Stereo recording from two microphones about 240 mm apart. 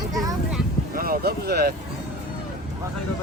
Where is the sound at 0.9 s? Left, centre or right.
Right.